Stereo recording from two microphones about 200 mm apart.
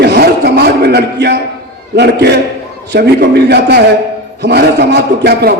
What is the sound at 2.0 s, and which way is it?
A man's voice, 55° right (ahead or behind).